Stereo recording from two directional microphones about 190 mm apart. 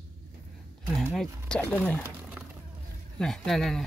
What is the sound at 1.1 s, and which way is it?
Speech, 5° left (ahead or behind).